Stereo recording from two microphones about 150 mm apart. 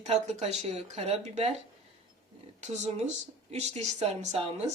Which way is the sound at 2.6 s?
50° right (ahead or behind).